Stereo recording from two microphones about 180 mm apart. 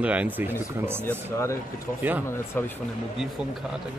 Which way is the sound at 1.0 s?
15° left (ahead or behind).